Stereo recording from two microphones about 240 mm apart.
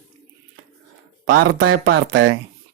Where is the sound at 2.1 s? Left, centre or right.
Right.